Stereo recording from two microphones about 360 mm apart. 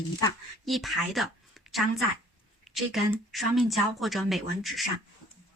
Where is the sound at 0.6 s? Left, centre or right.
Centre.